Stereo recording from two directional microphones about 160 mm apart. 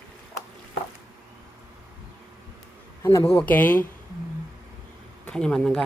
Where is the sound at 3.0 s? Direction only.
20° left (ahead or behind).